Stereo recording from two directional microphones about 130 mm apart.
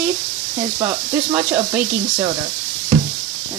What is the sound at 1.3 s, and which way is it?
Speech, 15° right (ahead or behind).